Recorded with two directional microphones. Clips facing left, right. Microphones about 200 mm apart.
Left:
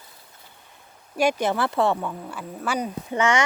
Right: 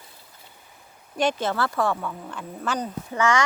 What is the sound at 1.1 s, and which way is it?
A child's voice, 10° left (ahead or behind).